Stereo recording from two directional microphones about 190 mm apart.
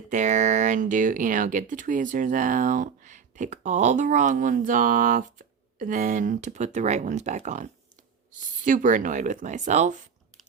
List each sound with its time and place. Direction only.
0.1 s speech: 40° right (ahead or behind)